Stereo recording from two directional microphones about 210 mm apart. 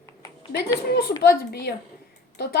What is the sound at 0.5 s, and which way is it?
A woman's voice, 50° left (ahead or behind).